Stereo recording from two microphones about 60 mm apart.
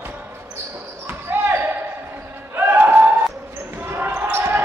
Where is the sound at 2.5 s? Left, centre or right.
Right.